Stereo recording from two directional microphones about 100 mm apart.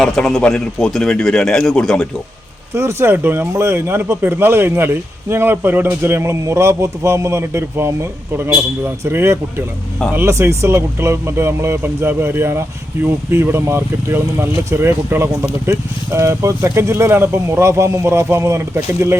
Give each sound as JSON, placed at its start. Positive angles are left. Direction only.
{"t": 0.0, "sound": "a man's voice", "side_deg": 5}
{"t": 2.7, "sound": "speech", "side_deg": -25}